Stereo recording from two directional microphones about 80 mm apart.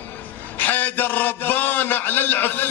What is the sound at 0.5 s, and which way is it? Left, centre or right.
A man's voice, left.